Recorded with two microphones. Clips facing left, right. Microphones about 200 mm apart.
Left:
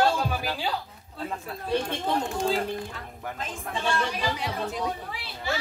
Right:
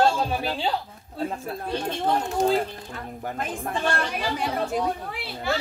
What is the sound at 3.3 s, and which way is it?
Speech, 55° right (ahead or behind).